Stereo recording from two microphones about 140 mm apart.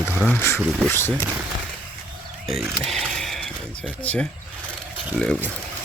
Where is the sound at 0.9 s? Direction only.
15° left (ahead or behind).